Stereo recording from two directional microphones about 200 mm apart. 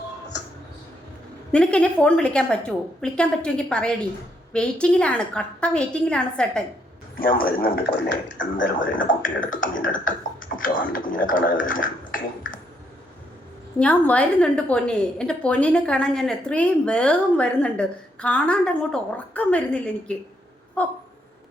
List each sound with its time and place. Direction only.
1.5 s a woman's voice: 5° left (ahead or behind)
7.2 s speech: 45° left (ahead or behind)
8.9 s speech: 45° left (ahead or behind)
13.7 s a woman's voice: 5° left (ahead or behind)
20.8 s a sound: 5° left (ahead or behind)